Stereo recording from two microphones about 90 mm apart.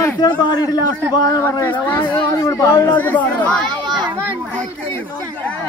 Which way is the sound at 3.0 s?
15° left (ahead or behind).